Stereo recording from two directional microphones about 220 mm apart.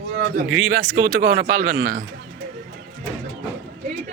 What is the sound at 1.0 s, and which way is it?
Speech, 40° right (ahead or behind).